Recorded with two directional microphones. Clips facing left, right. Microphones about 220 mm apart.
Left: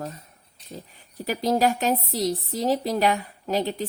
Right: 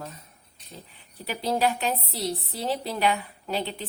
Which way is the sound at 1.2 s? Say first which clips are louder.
Left 4 dB; 45° left (ahead or behind).